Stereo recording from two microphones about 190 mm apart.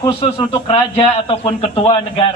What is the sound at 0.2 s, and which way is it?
A man's voice, 30° left (ahead or behind).